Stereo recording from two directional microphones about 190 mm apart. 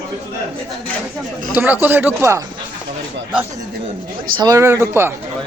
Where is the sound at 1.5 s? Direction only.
10° right (ahead or behind).